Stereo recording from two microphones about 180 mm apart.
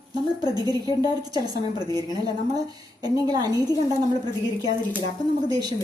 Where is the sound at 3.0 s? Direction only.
25° right (ahead or behind).